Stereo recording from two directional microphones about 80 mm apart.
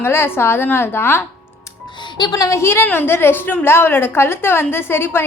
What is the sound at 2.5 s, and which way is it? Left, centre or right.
A woman's voice, left.